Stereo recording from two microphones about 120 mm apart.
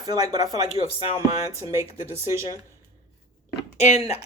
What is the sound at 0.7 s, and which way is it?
Speech, 55° left (ahead or behind).